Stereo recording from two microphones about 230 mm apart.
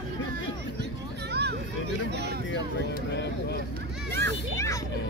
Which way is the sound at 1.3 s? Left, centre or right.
Right.